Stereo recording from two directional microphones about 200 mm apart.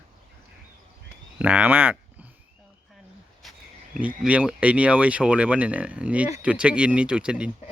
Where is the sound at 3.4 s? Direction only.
Centre (ahead or behind).